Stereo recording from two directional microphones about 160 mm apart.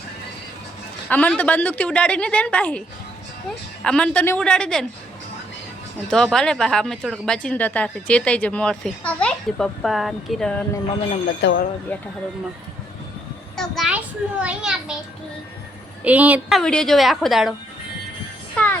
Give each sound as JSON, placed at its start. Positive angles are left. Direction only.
{"t": 1.1, "sound": "speech", "side_deg": 10}
{"t": 3.8, "sound": "a child's voice", "side_deg": 5}
{"t": 6.1, "sound": "a child's voice", "side_deg": 5}
{"t": 11.4, "sound": "speech", "side_deg": 90}
{"t": 11.9, "sound": "speech", "side_deg": 10}
{"t": 13.6, "sound": "a child's voice", "side_deg": 0}
{"t": 16.0, "sound": "speech", "side_deg": -10}
{"t": 16.6, "sound": "a child's voice", "side_deg": 5}
{"t": 18.5, "sound": "music", "side_deg": 10}